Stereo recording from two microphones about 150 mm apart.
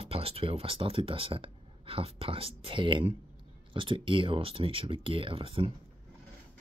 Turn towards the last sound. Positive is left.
turn(degrees=-40)  # may be behind; listen again after turning